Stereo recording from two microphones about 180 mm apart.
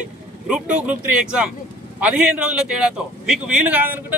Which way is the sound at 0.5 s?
5° right (ahead or behind).